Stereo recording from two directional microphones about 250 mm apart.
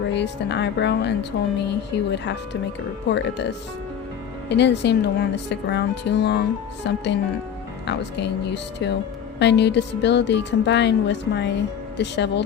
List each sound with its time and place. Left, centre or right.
0.1 s speech: left